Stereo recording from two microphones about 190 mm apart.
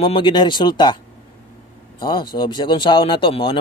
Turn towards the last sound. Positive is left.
turn(degrees=25)  # may be behind; listen again after turning